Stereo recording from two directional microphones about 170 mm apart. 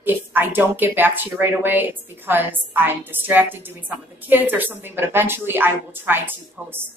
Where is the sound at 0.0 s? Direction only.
10° right (ahead or behind).